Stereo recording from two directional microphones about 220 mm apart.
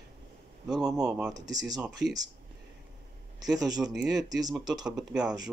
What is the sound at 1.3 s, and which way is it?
Speech, 15° right (ahead or behind).